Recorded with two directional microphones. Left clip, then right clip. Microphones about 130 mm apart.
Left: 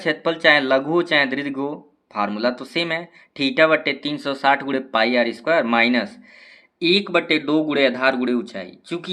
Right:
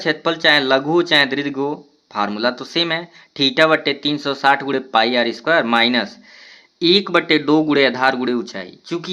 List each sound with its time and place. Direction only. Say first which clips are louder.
0.0 s speech: right 1 dB; 25° right (ahead or behind)
6.7 s speech: right 3 dB; 45° right (ahead or behind)